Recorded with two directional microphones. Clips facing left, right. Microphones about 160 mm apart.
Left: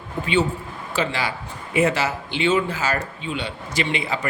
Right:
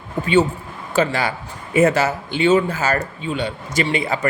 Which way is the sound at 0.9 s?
45° right (ahead or behind).